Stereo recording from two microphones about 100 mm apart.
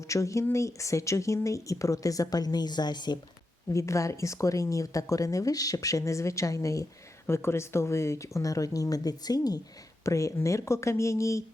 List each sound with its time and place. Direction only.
0.1 s a woman's voice: 30° left (ahead or behind); by 3.2 s 45° left (ahead or behind)
3.7 s a woman's voice: 30° left (ahead or behind)